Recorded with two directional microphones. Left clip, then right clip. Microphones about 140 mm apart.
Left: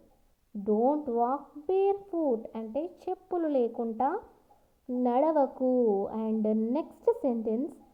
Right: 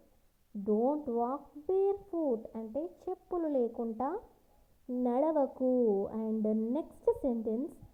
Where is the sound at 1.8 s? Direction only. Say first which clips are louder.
Left 5 dB; 10° right (ahead or behind).